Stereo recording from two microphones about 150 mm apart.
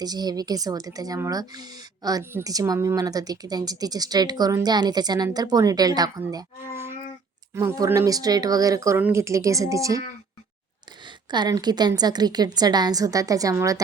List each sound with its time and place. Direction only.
0.0 s a woman's voice: 25° right (ahead or behind)
11.3 s a woman's voice: 30° right (ahead or behind)